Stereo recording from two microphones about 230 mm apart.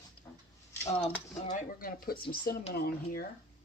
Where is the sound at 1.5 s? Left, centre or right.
Left.